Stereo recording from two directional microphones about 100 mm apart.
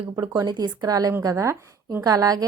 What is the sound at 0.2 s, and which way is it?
A woman's voice, 40° right (ahead or behind).